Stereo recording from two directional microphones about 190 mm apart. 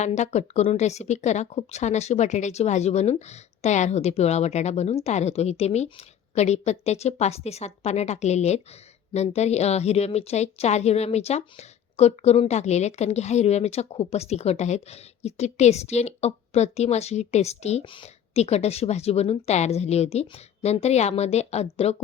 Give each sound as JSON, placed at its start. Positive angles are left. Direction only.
{"t": 0.0, "sound": "a woman's voice", "side_deg": 35}